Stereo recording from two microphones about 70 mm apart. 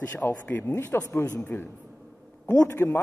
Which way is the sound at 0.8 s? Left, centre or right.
Left.